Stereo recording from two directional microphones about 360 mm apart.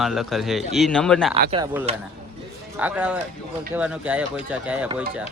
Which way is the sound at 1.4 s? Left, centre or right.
Centre.